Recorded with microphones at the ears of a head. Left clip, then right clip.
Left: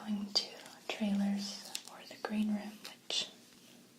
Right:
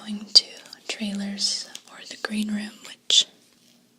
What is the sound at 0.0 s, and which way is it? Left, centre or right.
Whispering, right.